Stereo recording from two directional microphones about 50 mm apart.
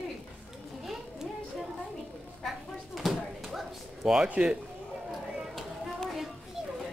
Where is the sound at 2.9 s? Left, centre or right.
Centre.